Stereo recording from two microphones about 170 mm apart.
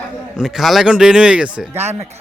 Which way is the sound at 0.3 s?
Centre (ahead or behind).